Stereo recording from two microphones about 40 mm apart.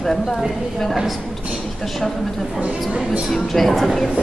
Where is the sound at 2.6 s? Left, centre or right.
Right.